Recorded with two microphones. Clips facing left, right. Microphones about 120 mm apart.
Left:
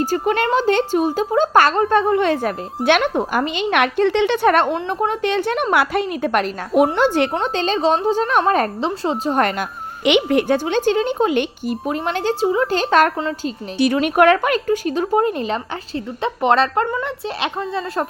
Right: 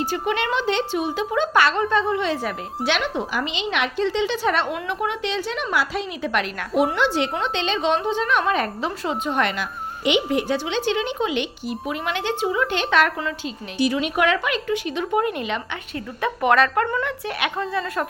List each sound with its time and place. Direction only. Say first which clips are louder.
0.0 s speech: left 5 dB; 40° left (ahead or behind)
4.7 s a woman's voice: left 5 dB; 35° left (ahead or behind)
5.3 s a woman's voice: left 7 dB; 55° left (ahead or behind)
10.0 s speech: left 5 dB; 65° left (ahead or behind); by 13.1 s 40° left (ahead or behind)
13.7 s a woman's voice: left 6 dB; 55° left (ahead or behind); by 18.0 s 25° left (ahead or behind)